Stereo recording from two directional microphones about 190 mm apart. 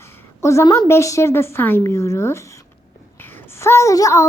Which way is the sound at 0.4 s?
15° left (ahead or behind).